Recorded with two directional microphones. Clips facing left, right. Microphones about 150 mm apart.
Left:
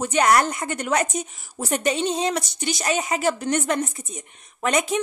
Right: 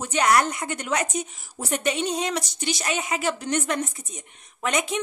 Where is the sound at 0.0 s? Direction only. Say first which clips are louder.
Left 2 dB; 45° left (ahead or behind); by 2.3 s 30° left (ahead or behind).